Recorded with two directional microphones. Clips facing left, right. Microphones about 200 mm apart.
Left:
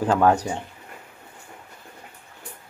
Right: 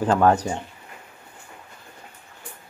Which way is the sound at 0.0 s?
5° left (ahead or behind).